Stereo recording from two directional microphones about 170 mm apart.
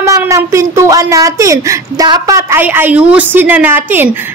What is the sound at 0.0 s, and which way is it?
A woman's voice, 20° right (ahead or behind).